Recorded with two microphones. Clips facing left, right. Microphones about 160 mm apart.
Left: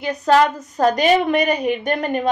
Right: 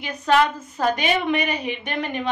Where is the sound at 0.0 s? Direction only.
40° left (ahead or behind).